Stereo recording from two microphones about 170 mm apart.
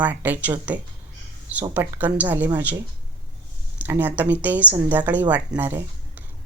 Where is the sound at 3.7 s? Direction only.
10° right (ahead or behind).